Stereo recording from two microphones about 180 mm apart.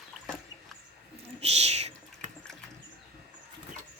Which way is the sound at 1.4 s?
35° right (ahead or behind).